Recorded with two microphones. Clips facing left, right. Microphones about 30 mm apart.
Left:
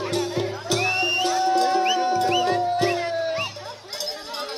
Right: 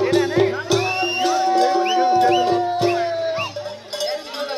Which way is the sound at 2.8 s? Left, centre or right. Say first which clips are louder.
Right 3 dB; centre.